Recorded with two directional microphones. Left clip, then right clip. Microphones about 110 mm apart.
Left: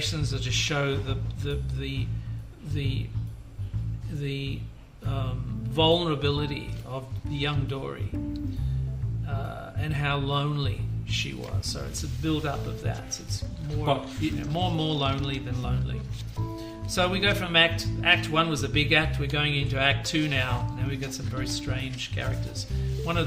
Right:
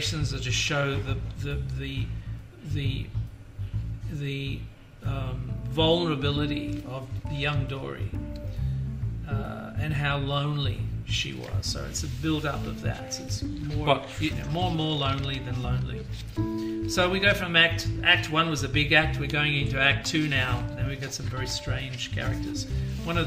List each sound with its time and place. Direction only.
0.0 s speech: 35° left (ahead or behind)
4.2 s speech: 30° left (ahead or behind)
9.3 s speech: 35° left (ahead or behind)